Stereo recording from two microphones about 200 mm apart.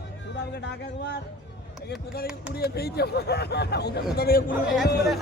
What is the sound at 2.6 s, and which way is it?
A man's voice, 50° left (ahead or behind).